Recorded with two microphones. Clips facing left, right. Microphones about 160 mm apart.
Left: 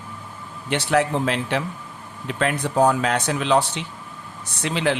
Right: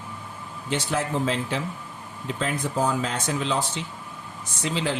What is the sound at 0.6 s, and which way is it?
Speech, 70° left (ahead or behind).